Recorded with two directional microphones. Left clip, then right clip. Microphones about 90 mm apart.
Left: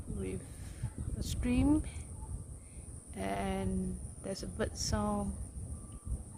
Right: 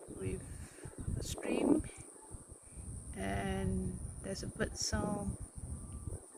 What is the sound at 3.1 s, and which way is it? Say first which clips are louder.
Speech: left 3 dB; 30° left (ahead or behind).